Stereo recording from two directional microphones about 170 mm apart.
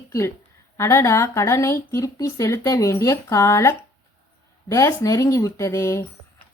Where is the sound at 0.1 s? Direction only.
15° left (ahead or behind).